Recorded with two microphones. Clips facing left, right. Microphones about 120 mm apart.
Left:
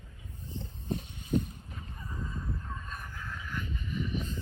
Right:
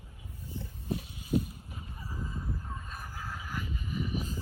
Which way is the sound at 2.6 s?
25° right (ahead or behind).